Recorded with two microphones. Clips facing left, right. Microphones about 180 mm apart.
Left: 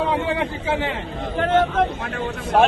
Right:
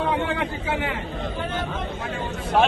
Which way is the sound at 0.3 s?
25° left (ahead or behind).